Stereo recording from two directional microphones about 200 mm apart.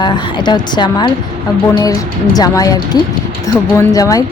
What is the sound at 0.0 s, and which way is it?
Speech, 20° left (ahead or behind).